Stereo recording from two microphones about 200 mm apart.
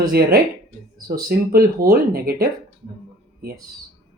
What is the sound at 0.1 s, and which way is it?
Speech, 50° right (ahead or behind).